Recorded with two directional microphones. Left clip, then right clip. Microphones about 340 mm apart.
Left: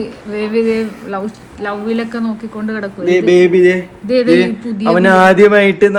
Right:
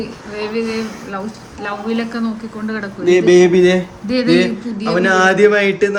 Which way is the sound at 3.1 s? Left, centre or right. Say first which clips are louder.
Even; centre.